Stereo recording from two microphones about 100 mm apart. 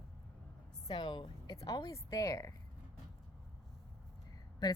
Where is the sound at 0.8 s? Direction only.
55° left (ahead or behind).